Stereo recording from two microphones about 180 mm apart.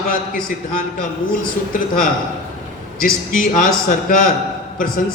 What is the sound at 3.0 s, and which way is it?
A man's voice, 45° left (ahead or behind).